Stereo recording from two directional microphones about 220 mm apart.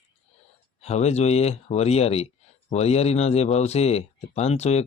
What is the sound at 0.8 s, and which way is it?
Speech, 30° left (ahead or behind).